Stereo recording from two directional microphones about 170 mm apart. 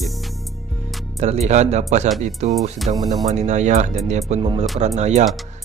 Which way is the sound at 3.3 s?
45° right (ahead or behind).